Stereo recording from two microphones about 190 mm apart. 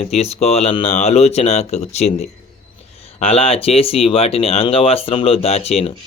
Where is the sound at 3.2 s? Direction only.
30° left (ahead or behind).